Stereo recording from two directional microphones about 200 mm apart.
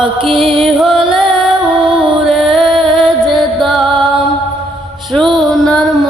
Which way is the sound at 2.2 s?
Centre (ahead or behind).